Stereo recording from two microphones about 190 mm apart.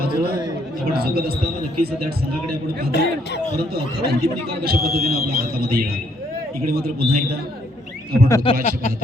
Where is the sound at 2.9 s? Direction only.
60° left (ahead or behind).